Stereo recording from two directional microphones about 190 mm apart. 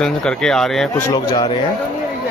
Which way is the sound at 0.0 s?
5° left (ahead or behind).